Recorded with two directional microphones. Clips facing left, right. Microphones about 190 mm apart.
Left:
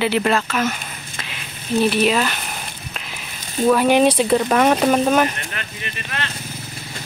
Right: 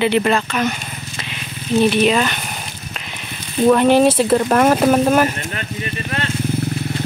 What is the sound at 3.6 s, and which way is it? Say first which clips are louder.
Speech: right 3 dB; 5° left (ahead or behind).